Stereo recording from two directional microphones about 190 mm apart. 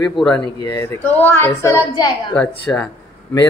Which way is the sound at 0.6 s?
15° left (ahead or behind).